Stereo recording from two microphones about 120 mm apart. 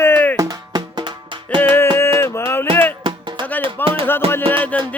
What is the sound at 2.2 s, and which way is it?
Music, 20° left (ahead or behind).